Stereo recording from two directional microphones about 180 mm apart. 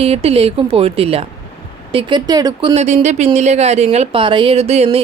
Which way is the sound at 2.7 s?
35° right (ahead or behind).